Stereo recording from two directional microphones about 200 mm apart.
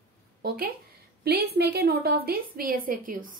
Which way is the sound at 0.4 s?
50° right (ahead or behind).